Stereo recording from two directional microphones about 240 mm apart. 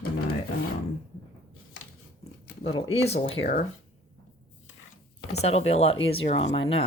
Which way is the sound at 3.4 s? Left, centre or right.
Left.